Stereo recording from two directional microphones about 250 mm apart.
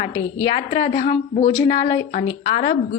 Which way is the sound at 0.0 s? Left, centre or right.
Centre.